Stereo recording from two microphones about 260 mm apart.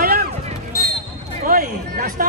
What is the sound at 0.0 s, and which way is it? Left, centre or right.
Basketball bounce, right.